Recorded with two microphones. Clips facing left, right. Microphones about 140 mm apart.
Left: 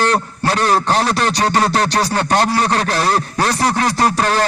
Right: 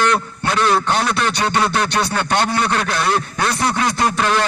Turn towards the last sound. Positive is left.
turn(degrees=35)  # may be behind; listen again after turning